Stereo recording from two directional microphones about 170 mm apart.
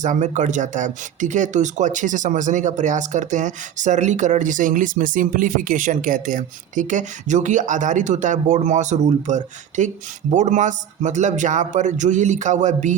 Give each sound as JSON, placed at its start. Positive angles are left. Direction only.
{"t": 0.0, "sound": "speech", "side_deg": -45}